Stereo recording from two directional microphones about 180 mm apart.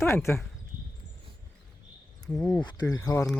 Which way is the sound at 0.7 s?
50° right (ahead or behind).